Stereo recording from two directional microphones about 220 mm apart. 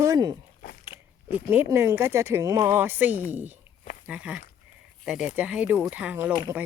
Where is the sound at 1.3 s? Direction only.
10° right (ahead or behind).